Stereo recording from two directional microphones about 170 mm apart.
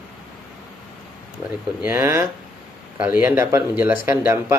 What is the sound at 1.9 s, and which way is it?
Speech, 15° right (ahead or behind).